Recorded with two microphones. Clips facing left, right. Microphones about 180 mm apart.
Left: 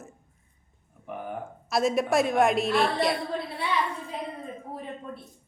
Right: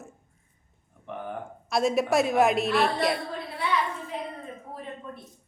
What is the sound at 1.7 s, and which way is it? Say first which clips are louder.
A woman's voice: even; centre (ahead or behind).